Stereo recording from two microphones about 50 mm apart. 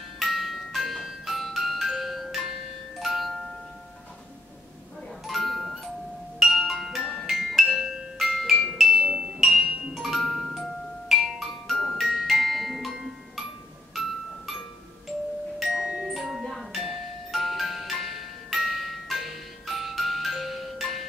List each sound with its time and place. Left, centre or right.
0.2 s music: centre
5.2 s doorbell: centre
6.4 s music: centre
9.4 s music: centre
9.7 s music: centre
10.1 s music: centre
15.6 s music: centre